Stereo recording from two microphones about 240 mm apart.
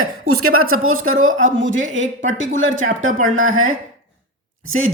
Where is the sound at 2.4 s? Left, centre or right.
Right.